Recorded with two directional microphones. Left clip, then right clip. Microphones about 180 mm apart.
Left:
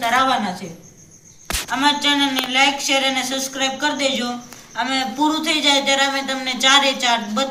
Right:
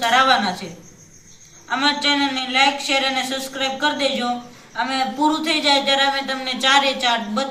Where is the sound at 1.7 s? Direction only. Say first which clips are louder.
Left 1 dB; 10° left (ahead or behind).